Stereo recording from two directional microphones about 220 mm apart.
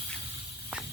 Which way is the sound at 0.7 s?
5° right (ahead or behind).